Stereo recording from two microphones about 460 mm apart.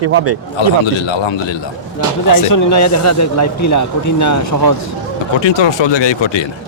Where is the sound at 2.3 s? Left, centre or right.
Left.